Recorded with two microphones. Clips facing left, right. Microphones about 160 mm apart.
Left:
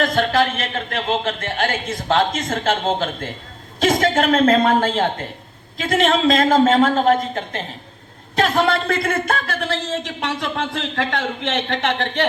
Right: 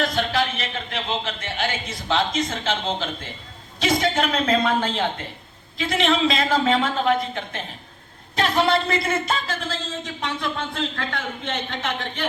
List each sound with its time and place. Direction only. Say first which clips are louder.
0.0 s a man's voice: left 5 dB; 50° left (ahead or behind); by 12.3 s 75° left (ahead or behind)